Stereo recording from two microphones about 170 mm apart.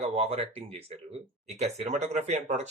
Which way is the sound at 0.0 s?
35° right (ahead or behind).